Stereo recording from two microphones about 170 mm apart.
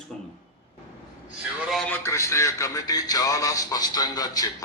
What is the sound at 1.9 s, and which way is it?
Speech, 15° left (ahead or behind).